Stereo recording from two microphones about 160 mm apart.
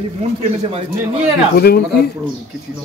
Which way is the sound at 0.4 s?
40° right (ahead or behind).